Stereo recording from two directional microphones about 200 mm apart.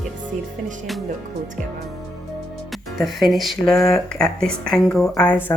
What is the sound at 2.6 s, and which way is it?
Speech, centre (ahead or behind).